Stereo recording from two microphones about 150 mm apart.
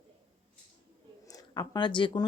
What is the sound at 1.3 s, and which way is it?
Speech, 25° left (ahead or behind).